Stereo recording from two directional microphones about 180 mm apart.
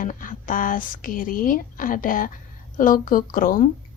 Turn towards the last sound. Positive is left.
turn(degrees=50)  # may be behind; listen again after turning